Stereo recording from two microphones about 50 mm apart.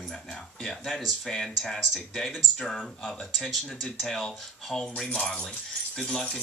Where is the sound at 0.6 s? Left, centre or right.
Centre.